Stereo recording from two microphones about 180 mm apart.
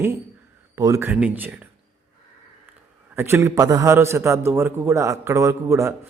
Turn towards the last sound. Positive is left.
turn(degrees=-15)  # may be behind; listen again after turning